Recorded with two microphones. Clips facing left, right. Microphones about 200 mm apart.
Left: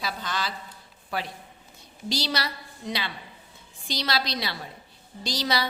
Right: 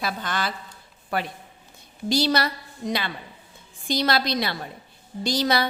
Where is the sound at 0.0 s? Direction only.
55° right (ahead or behind).